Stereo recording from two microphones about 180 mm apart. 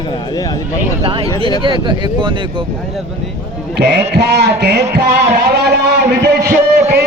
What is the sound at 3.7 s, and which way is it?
A man's voice, 70° right (ahead or behind).